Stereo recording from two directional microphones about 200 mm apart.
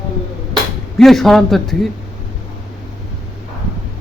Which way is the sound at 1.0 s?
Centre (ahead or behind).